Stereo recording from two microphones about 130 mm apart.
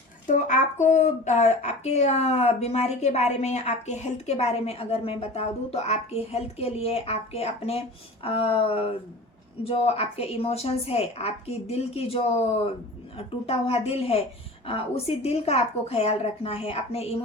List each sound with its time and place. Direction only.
0.3 s a woman's voice: 70° left (ahead or behind); by 17.2 s 50° left (ahead or behind)